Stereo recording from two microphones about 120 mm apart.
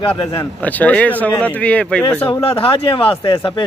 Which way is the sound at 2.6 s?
50° left (ahead or behind).